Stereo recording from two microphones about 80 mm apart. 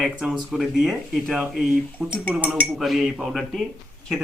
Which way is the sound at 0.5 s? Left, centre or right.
Centre.